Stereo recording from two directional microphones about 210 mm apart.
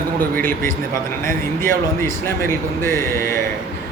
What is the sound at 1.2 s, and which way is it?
A man's voice, 10° left (ahead or behind).